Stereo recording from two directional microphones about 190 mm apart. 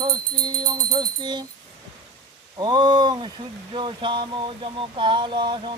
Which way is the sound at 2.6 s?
20° right (ahead or behind).